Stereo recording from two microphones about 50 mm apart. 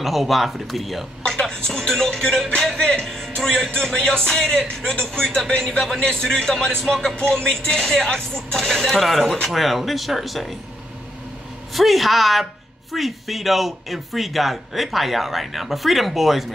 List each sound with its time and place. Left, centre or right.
0.0 s a man's voice: centre
2.5 s music: centre
7.2 s a man's voice: centre
11.7 s a man's voice: centre